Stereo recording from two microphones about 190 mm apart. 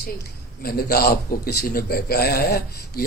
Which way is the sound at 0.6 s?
55° left (ahead or behind).